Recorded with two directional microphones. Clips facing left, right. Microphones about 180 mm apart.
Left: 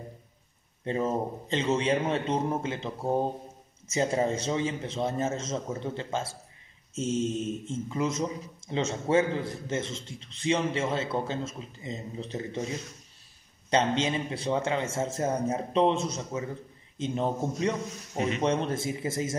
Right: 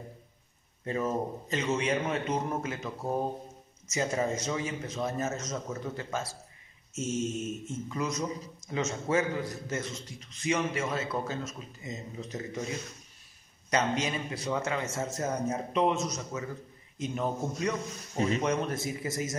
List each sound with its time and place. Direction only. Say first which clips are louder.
0.8 s a man's voice: left 2 dB; 25° left (ahead or behind)
7.6 s a man's voice: left 4 dB; 25° left (ahead or behind)
13.7 s a man's voice: left 3 dB; 25° left (ahead or behind)